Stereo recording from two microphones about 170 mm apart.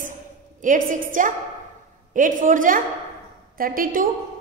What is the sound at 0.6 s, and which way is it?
A woman's voice, 50° right (ahead or behind).